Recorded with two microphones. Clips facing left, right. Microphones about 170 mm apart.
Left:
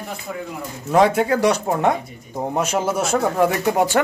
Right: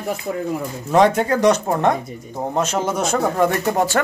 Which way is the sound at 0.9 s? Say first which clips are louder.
Right 1 dB; 5° left (ahead or behind).